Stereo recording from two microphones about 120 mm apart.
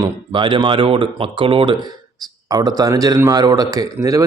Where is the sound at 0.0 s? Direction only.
40° right (ahead or behind).